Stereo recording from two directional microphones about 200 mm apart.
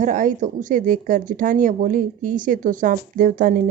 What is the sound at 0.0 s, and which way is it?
Speech, 40° right (ahead or behind).